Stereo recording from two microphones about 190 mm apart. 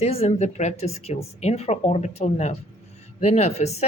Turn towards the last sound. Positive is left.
turn(degrees=35)  # may be behind; listen again after turning